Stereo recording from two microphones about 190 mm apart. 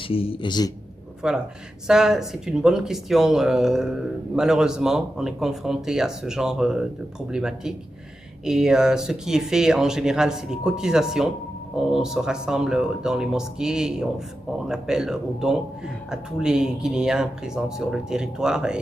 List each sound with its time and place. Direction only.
0.1 s speech: 30° left (ahead or behind)
1.2 s speech: 5° right (ahead or behind)